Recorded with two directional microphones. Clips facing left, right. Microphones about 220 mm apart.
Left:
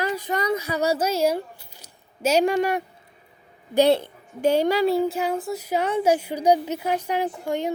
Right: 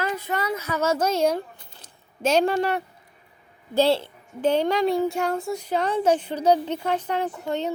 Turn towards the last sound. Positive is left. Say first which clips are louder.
# left 1 dB
turn(degrees=10)  # may be behind; listen again after turning